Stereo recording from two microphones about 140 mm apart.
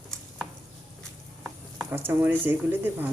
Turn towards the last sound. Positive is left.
turn(degrees=-15)  # may be behind; listen again after turning